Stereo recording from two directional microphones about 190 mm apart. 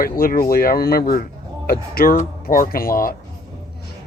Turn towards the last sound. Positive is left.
turn(degrees=50)  # may be behind; listen again after turning